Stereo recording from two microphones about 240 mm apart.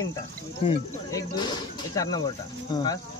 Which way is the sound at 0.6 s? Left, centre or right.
Centre.